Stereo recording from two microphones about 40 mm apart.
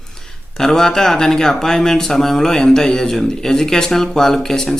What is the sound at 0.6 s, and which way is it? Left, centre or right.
Speech, centre.